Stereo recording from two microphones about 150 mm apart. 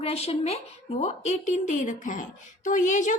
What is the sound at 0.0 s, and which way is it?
A woman's voice, 40° left (ahead or behind).